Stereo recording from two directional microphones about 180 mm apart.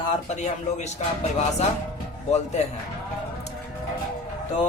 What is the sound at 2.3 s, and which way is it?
Music, 40° left (ahead or behind).